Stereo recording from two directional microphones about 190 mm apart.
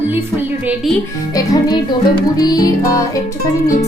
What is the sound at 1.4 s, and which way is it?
Music, 20° left (ahead or behind).